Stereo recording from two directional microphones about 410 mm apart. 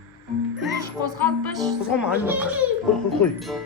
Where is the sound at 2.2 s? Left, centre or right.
Centre.